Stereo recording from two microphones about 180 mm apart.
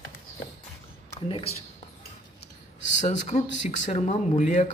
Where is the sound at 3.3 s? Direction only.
40° left (ahead or behind).